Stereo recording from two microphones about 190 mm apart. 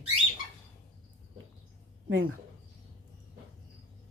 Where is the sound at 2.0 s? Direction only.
90° right.